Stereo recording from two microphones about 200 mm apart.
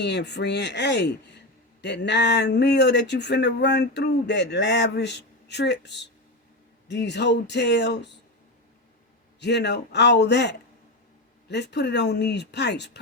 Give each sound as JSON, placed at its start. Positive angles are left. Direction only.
{"t": 0.0, "sound": "speech", "side_deg": 60}
{"t": 9.4, "sound": "speech", "side_deg": 60}